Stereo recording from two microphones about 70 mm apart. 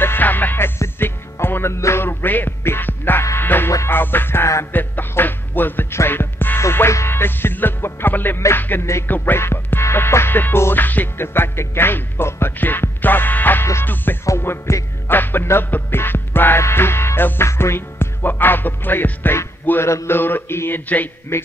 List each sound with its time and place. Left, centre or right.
0.0 s music: left
21.3 s speech: left